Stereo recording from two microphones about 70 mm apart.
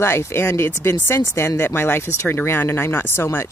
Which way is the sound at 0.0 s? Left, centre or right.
Left.